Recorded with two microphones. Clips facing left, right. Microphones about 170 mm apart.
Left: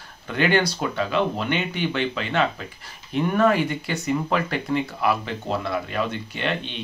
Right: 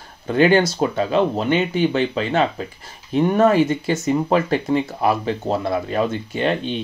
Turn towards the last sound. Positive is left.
turn(degrees=-35)  # may be behind; listen again after turning